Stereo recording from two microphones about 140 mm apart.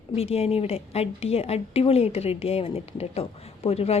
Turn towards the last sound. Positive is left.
turn(degrees=45)  # may be behind; listen again after turning